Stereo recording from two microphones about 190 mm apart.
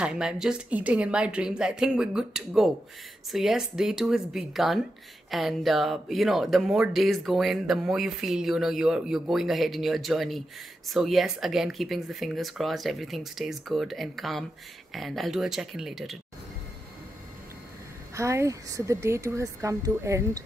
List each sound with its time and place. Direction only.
0.0 s speech: 5° right (ahead or behind)
18.1 s a woman's voice: 15° right (ahead or behind)